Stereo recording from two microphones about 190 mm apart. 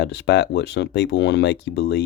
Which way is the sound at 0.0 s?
60° left (ahead or behind).